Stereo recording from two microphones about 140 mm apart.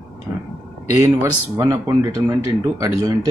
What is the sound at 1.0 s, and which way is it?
Speech, 20° right (ahead or behind).